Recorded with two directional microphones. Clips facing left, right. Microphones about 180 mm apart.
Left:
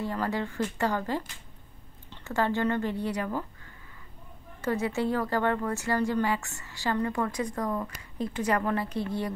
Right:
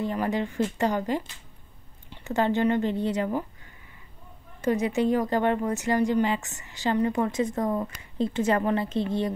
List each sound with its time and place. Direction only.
0.0 s a woman's voice: 20° right (ahead or behind)
4.6 s a woman's voice: 20° right (ahead or behind)